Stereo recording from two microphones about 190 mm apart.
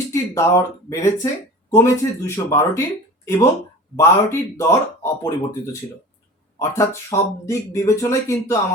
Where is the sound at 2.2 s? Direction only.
15° left (ahead or behind).